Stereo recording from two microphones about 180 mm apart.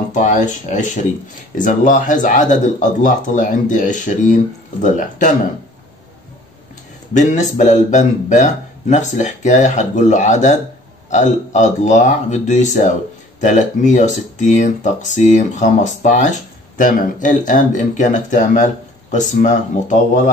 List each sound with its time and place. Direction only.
0.1 s speech: 45° left (ahead or behind)
7.2 s a man's voice: 40° left (ahead or behind)